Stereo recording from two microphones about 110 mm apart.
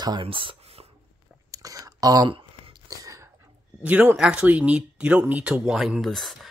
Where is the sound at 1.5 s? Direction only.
30° right (ahead or behind).